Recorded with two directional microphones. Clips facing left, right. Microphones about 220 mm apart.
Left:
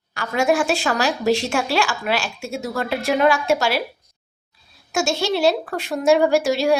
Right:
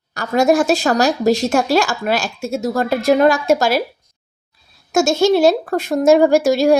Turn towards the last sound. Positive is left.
turn(degrees=-45)  # may be behind; listen again after turning